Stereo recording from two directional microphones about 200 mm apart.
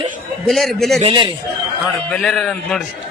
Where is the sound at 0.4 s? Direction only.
Centre (ahead or behind).